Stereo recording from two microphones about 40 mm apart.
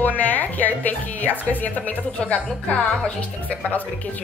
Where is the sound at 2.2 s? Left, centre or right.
Left.